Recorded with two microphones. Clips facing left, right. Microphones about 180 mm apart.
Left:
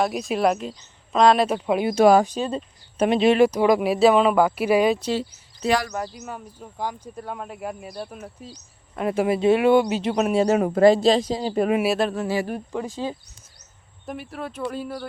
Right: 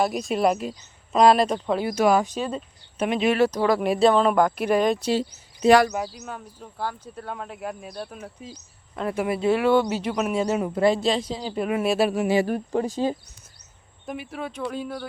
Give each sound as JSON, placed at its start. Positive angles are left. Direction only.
{"t": 0.0, "sound": "speech", "side_deg": 0}
{"t": 2.0, "sound": "a man's voice", "side_deg": 35}
{"t": 3.3, "sound": "speech", "side_deg": 15}
{"t": 3.8, "sound": "speech", "side_deg": 5}
{"t": 5.6, "sound": "speech", "side_deg": -55}
{"t": 5.9, "sound": "speech", "side_deg": -5}
{"t": 6.2, "sound": "speech", "side_deg": 5}
{"t": 9.1, "sound": "speech", "side_deg": 25}
{"t": 10.1, "sound": "a man's voice", "side_deg": 30}
{"t": 10.4, "sound": "speech", "side_deg": 70}
{"t": 10.8, "sound": "a man's voice", "side_deg": 40}
{"t": 11.9, "sound": "speech", "side_deg": -10}
{"t": 12.5, "sound": "speech", "side_deg": -40}
{"t": 14.1, "sound": "speech", "side_deg": 0}